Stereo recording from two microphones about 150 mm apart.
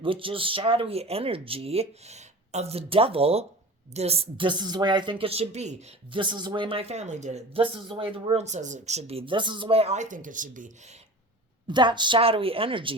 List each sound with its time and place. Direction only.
0.0 s speech: 35° right (ahead or behind)
6.1 s speech: 30° right (ahead or behind); by 10.7 s 60° right (ahead or behind)
11.7 s speech: 30° right (ahead or behind)